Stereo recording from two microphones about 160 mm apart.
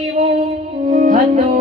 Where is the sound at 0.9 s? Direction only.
50° right (ahead or behind).